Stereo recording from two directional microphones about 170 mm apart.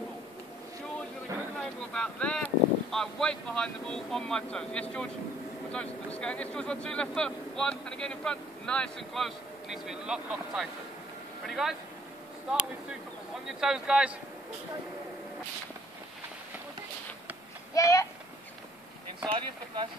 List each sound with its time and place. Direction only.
1.6 s speech: 5° left (ahead or behind)
13.5 s speech: 5° right (ahead or behind)
17.7 s speech: 20° left (ahead or behind)
19.3 s speech: 30° right (ahead or behind)